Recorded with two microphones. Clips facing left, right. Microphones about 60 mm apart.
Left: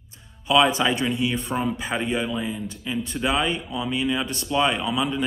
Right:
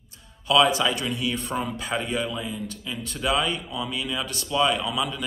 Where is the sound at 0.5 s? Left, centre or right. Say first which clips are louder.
Left 1 dB; left.